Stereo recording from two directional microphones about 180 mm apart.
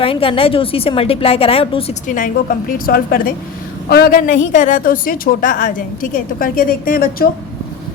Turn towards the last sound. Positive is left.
turn(degrees=55)  # may be behind; listen again after turning